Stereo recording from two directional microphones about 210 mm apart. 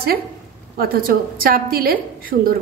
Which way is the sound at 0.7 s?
45° right (ahead or behind).